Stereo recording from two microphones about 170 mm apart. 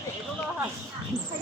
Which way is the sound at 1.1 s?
10° left (ahead or behind).